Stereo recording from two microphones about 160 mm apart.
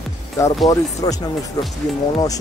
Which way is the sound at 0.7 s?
20° left (ahead or behind).